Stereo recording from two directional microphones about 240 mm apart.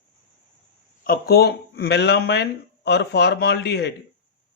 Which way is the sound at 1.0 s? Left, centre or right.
Left.